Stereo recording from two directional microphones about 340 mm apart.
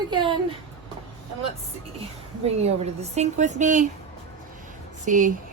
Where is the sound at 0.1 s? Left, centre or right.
Centre.